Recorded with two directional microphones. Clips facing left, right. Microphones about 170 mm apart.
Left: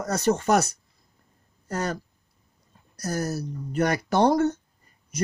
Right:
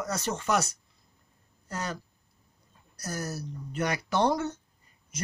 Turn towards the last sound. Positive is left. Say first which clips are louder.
# left 6 dB
turn(degrees=45)  # may be behind; listen again after turning